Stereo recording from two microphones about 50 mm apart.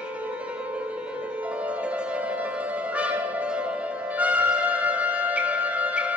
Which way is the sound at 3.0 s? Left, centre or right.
Right.